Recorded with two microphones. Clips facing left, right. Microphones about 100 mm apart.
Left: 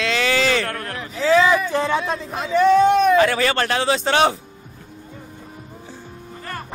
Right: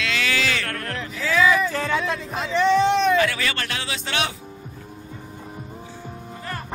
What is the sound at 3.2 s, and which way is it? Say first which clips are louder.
A man's voice: left 6 dB; 35° left (ahead or behind).